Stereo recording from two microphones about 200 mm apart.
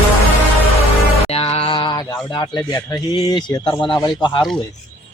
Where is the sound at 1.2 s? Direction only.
30° left (ahead or behind).